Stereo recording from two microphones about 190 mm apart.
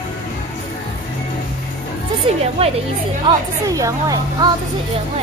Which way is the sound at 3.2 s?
20° right (ahead or behind).